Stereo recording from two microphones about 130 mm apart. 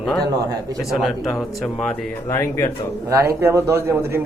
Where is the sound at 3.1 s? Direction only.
20° right (ahead or behind).